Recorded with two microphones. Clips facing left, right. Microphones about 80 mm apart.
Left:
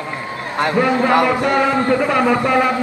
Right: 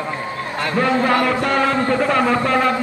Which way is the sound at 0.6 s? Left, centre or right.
Centre.